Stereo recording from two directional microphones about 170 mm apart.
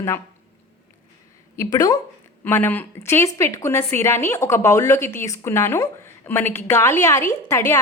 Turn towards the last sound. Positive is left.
turn(degrees=15)  # may be behind; listen again after turning